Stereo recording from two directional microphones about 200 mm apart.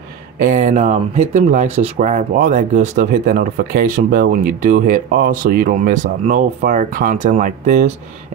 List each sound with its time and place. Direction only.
0.4 s speech: 40° right (ahead or behind)